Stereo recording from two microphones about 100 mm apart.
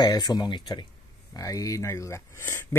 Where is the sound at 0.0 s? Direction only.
40° left (ahead or behind).